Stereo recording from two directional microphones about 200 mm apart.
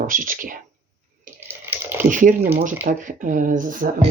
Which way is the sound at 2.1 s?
40° right (ahead or behind).